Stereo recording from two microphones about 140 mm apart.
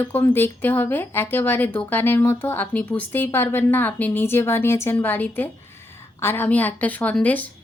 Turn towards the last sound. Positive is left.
turn(degrees=10)  # may be behind; listen again after turning